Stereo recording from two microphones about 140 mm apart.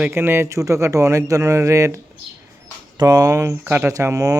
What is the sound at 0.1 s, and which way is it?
Speech, 15° right (ahead or behind).